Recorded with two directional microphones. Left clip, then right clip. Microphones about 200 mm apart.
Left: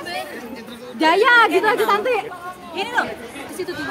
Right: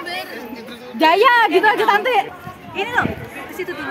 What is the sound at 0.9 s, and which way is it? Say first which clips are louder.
A woman's voice: right 1 dB; 55° right (ahead or behind).